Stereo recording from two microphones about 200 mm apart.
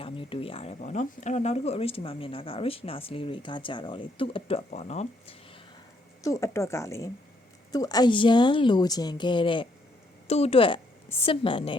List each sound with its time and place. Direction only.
0.0 s speech: 25° left (ahead or behind)
6.2 s speech: 15° left (ahead or behind)